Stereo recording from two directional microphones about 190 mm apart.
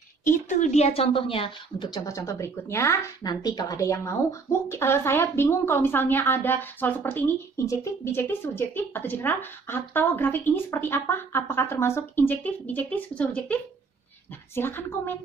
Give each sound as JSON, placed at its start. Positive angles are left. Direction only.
{"t": 0.2, "sound": "a woman's voice", "side_deg": 40}